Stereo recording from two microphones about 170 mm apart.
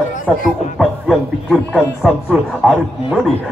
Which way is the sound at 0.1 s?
50° left (ahead or behind).